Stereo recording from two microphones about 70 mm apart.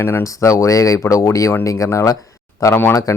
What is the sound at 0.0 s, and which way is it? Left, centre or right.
Speech, left.